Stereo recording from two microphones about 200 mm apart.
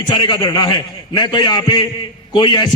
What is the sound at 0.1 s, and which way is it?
A man's voice, 20° left (ahead or behind).